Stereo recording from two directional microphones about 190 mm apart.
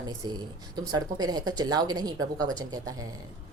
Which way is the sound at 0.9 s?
20° right (ahead or behind).